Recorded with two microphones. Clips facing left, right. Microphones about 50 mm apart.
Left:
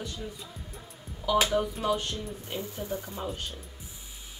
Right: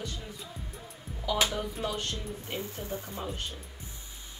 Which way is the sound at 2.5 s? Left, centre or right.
Right.